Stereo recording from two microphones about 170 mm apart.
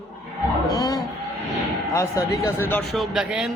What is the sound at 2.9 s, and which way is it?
Speech, centre (ahead or behind).